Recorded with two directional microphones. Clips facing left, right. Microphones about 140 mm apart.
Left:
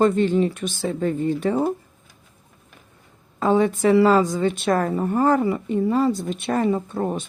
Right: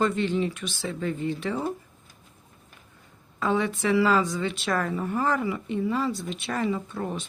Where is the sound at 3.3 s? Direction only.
40° left (ahead or behind).